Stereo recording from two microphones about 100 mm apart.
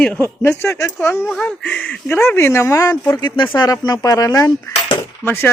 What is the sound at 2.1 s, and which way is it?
Speech, 25° left (ahead or behind).